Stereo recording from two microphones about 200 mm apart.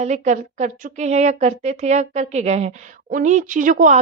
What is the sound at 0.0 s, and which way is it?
A woman's voice, 35° right (ahead or behind).